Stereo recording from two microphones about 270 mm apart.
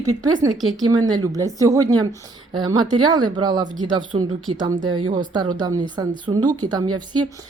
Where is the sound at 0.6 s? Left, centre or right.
Centre.